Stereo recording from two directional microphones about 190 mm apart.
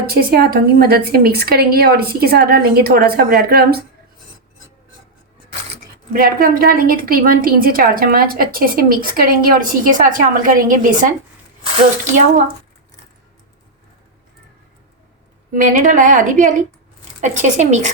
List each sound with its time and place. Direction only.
0.0 s a woman's voice: 55° right (ahead or behind)
6.1 s a woman's voice: 50° right (ahead or behind)
15.5 s a woman's voice: 45° right (ahead or behind)